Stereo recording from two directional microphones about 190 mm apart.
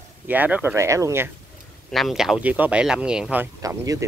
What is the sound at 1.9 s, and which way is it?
Speech, centre (ahead or behind).